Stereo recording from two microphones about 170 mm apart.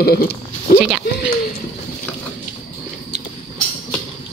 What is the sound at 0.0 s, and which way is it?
Speech, 65° left (ahead or behind).